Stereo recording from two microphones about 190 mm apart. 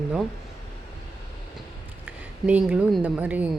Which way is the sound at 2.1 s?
5° right (ahead or behind).